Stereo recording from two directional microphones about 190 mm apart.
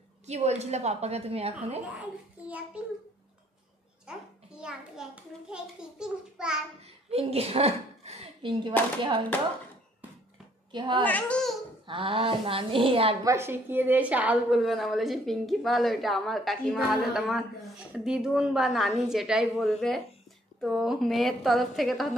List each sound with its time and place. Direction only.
0.3 s a woman's voice: 35° right (ahead or behind)
2.4 s a child's voice: 5° right (ahead or behind)
4.1 s a woman's voice: 5° right (ahead or behind)
7.1 s speech: 30° right (ahead or behind)
10.7 s a woman's voice: 25° right (ahead or behind)
11.1 s a woman's voice: 5° left (ahead or behind)
11.8 s a woman's voice: 25° right (ahead or behind)
13.2 s a woman's voice: 15° right (ahead or behind)